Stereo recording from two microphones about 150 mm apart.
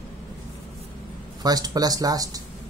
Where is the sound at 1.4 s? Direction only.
25° right (ahead or behind).